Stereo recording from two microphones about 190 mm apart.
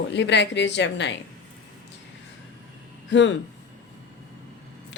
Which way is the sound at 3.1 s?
70° left (ahead or behind).